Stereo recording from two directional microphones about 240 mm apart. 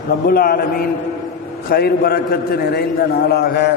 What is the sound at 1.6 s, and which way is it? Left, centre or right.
A man's voice, left.